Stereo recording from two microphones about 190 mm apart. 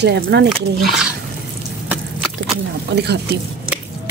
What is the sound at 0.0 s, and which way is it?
Speech, 60° right (ahead or behind).